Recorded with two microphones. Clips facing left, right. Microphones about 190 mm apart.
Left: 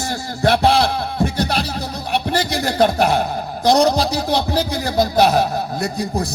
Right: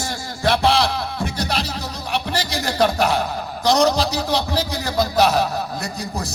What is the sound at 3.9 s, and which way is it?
A man's voice, 55° left (ahead or behind).